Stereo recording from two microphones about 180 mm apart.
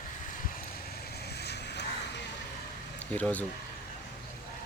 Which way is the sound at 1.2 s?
65° left (ahead or behind).